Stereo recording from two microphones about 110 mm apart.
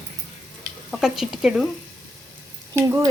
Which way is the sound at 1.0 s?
5° right (ahead or behind).